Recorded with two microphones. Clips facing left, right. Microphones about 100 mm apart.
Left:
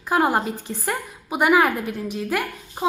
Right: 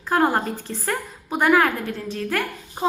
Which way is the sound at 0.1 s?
10° left (ahead or behind).